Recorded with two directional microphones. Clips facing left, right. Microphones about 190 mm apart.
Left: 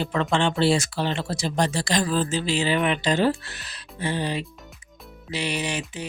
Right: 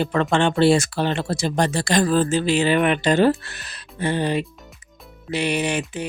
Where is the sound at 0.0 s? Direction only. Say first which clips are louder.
Right 4 dB; 55° right (ahead or behind).